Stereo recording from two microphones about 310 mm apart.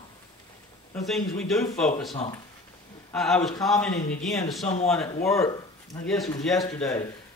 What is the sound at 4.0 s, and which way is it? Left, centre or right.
Speech, left.